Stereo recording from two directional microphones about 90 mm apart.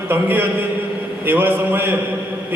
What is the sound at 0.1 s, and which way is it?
A man's voice, 20° right (ahead or behind).